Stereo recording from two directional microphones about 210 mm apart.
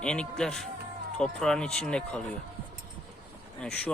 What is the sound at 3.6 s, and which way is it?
Speech, 5° left (ahead or behind).